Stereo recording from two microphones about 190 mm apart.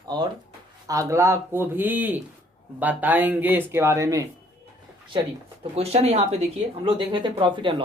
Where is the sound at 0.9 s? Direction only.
15° right (ahead or behind).